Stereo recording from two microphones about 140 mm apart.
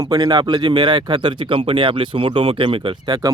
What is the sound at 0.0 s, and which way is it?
Speech, 30° right (ahead or behind).